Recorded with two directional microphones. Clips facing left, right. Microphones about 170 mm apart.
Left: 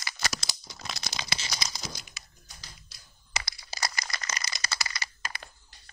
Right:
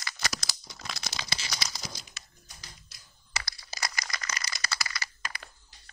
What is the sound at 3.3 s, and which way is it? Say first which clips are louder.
Crushing: left 2 dB; 20° left (ahead or behind).